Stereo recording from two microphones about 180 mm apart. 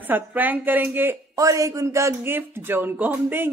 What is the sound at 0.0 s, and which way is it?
Speech, 10° right (ahead or behind).